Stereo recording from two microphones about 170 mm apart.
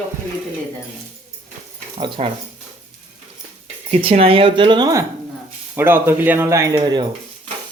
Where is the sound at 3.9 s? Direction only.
35° right (ahead or behind); by 7.0 s 20° right (ahead or behind).